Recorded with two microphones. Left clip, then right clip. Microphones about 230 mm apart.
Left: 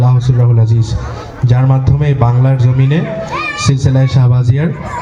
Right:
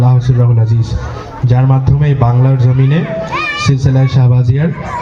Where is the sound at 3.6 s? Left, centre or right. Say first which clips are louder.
Even; left.